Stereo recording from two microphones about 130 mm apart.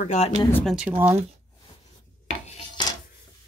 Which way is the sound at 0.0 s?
60° left (ahead or behind).